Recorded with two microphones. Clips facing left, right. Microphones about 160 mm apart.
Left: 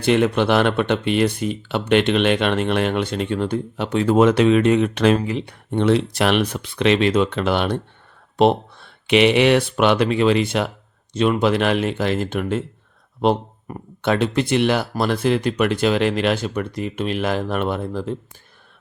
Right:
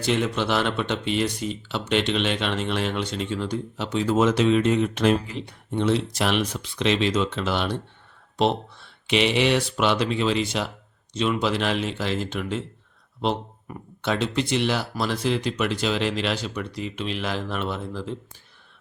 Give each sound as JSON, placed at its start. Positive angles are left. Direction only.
{"t": 0.0, "sound": "speech", "side_deg": 55}